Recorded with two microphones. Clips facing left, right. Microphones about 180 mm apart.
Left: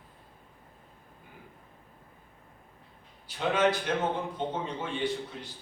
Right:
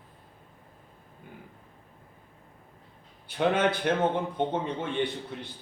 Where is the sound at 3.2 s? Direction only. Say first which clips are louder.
Right 2 dB; 55° right (ahead or behind).